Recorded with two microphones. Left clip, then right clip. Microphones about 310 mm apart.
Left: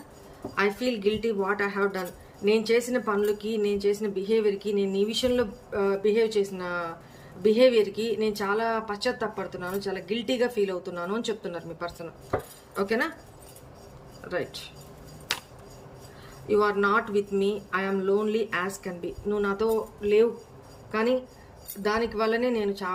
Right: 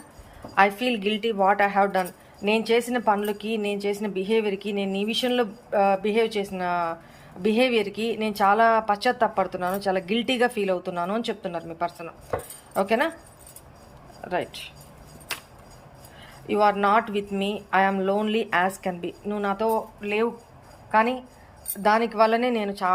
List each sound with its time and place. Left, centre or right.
0.5 s speech: centre
16.5 s speech: centre